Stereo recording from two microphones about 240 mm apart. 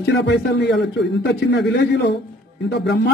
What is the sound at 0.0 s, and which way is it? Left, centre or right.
A man's voice, left.